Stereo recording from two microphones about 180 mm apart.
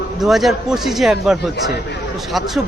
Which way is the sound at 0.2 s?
Centre (ahead or behind).